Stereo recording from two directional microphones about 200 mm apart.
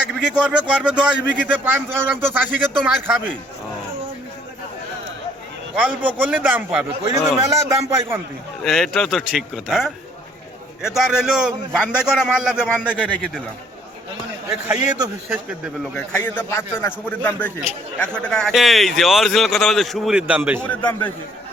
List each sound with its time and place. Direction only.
0.1 s a man's voice: 5° right (ahead or behind)
5.7 s a man's voice: 5° right (ahead or behind)
8.6 s a man's voice: centre (ahead or behind)
14.7 s a man's voice: 15° right (ahead or behind)
16.0 s a man's voice: 10° left (ahead or behind); by 20.7 s 10° right (ahead or behind)
20.7 s a man's voice: 10° left (ahead or behind)